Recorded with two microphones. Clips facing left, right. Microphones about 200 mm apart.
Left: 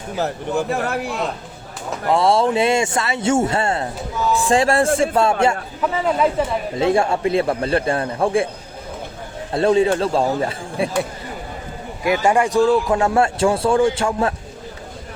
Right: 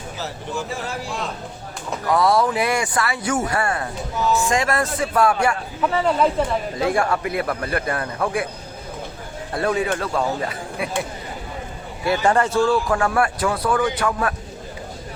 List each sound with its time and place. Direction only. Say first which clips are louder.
0.2 s speech: left 8 dB; 60° left (ahead or behind)
2.0 s a man's voice: left 2 dB; 25° left (ahead or behind)
6.1 s a woman's voice: left 2 dB; 5° left (ahead or behind)
6.7 s a man's voice: left 5 dB; 25° left (ahead or behind)
9.5 s a man's voice: left 6 dB; 25° left (ahead or behind)
12.0 s a man's voice: left 2 dB; 15° left (ahead or behind)